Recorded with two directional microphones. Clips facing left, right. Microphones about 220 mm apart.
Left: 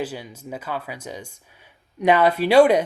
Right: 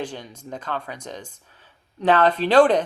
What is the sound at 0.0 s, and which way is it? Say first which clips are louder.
Speech: left 2 dB; 5° left (ahead or behind).